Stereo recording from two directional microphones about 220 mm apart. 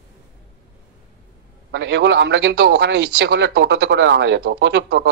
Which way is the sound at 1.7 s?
50° right (ahead or behind).